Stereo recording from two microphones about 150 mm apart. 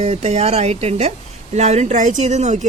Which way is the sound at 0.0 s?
45° right (ahead or behind).